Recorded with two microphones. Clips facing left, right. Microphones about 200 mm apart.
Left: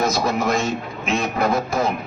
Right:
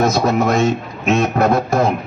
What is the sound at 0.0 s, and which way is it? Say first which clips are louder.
A man's voice: right 5 dB; 60° right (ahead or behind).